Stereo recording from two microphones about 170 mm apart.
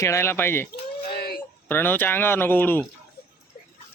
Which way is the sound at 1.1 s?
65° left (ahead or behind).